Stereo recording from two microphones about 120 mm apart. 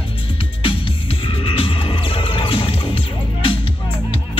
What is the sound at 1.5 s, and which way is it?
Music, 50° left (ahead or behind).